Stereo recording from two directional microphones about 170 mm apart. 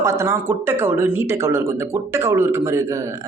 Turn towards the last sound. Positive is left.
turn(degrees=-15)  # may be behind; listen again after turning